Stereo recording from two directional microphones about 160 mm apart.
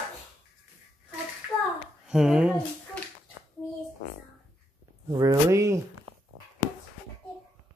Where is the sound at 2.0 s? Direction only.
5° right (ahead or behind).